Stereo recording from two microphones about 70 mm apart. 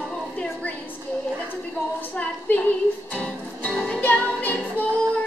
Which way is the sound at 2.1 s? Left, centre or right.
Left.